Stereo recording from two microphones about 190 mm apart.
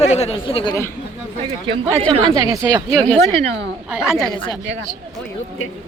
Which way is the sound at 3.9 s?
5° right (ahead or behind).